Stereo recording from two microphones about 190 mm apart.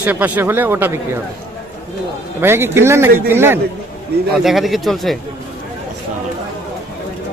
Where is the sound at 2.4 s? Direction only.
10° right (ahead or behind).